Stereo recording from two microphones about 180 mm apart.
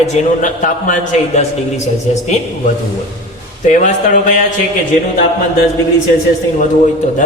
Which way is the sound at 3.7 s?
45° left (ahead or behind).